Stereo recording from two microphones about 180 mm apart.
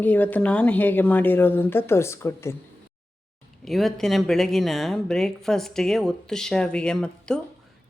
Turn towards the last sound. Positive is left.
turn(degrees=5)  # may be behind; listen again after turning